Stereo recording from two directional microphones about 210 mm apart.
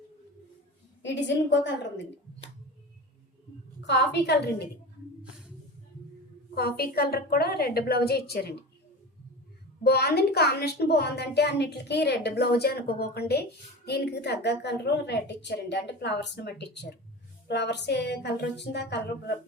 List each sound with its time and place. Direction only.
1.0 s a woman's voice: 60° left (ahead or behind)
3.8 s a woman's voice: 55° left (ahead or behind)
5.2 s a sound: 5° right (ahead or behind)
6.5 s a woman's voice: 50° left (ahead or behind)
9.8 s a woman's voice: 50° left (ahead or behind)